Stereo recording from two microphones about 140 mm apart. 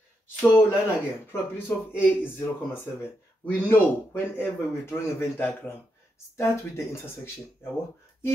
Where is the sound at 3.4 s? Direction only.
15° left (ahead or behind).